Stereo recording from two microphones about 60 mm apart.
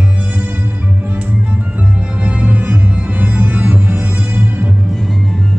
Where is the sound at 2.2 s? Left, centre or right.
Right.